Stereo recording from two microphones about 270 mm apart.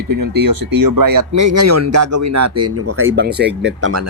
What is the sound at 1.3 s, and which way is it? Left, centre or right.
Speech, right.